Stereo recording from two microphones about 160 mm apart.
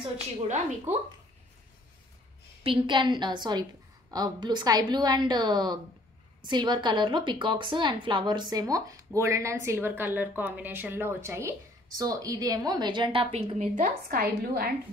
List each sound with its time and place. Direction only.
0.4 s a woman's voice: 45° right (ahead or behind)
2.6 s a woman's voice: 30° right (ahead or behind); by 14.7 s 75° right (ahead or behind)